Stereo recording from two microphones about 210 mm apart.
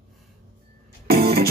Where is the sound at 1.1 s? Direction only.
45° right (ahead or behind).